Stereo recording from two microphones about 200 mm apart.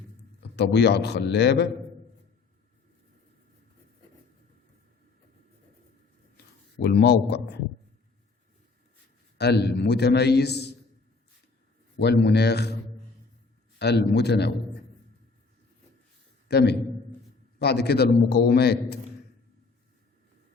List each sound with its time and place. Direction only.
0.5 s a man's voice: 55° left (ahead or behind)
6.3 s a sound: 55° left (ahead or behind)
9.4 s a man's voice: 55° left (ahead or behind)
11.9 s a man's voice: 55° left (ahead or behind)
13.7 s a man's voice: 55° left (ahead or behind)
16.5 s a man's voice: 55° left (ahead or behind)